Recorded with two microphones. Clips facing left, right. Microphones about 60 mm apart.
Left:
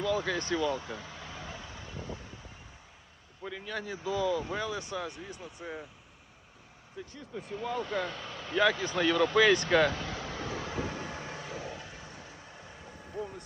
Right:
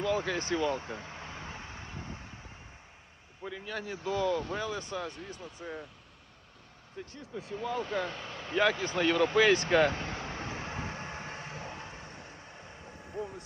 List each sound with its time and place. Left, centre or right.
0.0 s speech: right
0.5 s vehicle: right
3.4 s speech: centre
7.2 s speech: centre
9.6 s vehicle: right
12.4 s vehicle: centre
13.1 s speech: centre